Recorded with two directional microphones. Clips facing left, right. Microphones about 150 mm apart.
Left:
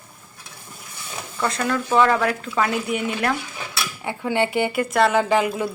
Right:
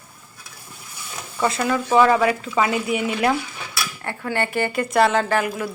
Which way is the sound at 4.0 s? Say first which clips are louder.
Left 3 dB; 15° left (ahead or behind).